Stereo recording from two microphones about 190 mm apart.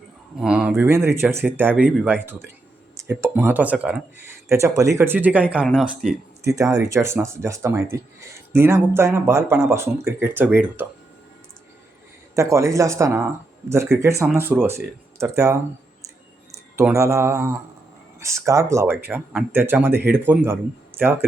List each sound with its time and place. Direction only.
0.3 s speech: 5° right (ahead or behind)
6.8 s speech: 15° right (ahead or behind)
12.4 s speech: 15° right (ahead or behind)